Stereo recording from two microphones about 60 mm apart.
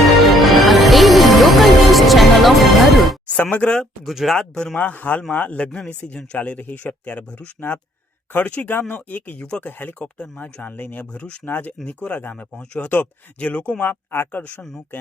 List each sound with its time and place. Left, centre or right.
0.2 s music: centre
3.2 s speech: left
4.0 s speech: centre
4.4 s speech: centre
4.8 s speech: left
13.8 s speech: left